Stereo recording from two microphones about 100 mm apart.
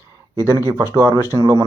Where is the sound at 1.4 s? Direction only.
45° right (ahead or behind).